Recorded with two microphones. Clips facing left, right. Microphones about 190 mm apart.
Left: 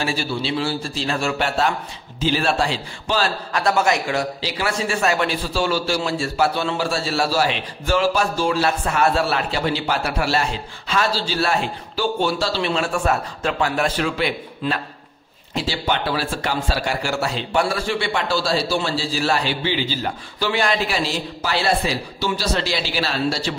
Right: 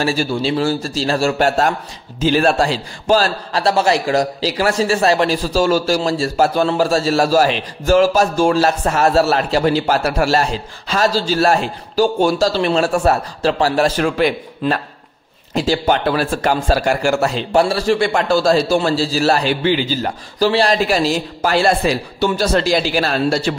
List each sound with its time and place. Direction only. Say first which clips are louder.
0.0 s a man's voice: right 6 dB; 45° right (ahead or behind)
17.6 s a man's voice: right 7 dB; 35° right (ahead or behind); by 23.5 s 50° right (ahead or behind)